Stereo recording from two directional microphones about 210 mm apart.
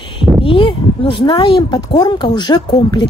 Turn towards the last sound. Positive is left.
turn(degrees=20)  # may be behind; listen again after turning